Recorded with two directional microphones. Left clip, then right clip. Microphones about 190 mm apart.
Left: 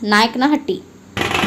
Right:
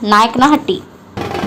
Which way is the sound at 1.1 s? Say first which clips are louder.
Left 3 dB; 50° right (ahead or behind).